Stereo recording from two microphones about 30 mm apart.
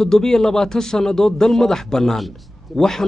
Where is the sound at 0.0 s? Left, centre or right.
Centre.